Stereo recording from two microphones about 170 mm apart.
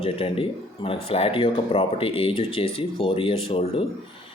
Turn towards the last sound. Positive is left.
turn(degrees=35)  # may be behind; listen again after turning